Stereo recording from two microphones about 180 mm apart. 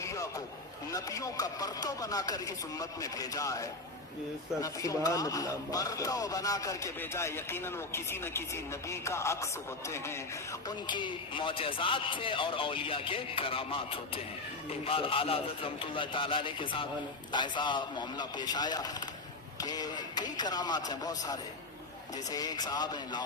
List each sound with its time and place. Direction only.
0.0 s a sound: 15° left (ahead or behind)
0.9 s speech: 20° left (ahead or behind)
10.8 s speech: 25° left (ahead or behind)